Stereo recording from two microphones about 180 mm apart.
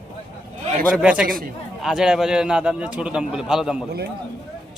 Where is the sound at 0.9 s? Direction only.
5° right (ahead or behind).